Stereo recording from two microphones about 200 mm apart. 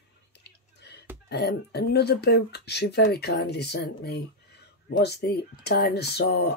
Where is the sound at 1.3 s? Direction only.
55° left (ahead or behind).